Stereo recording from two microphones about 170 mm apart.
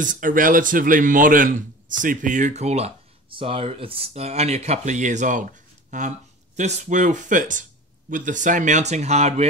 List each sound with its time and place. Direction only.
0.0 s a man's voice: 50° right (ahead or behind)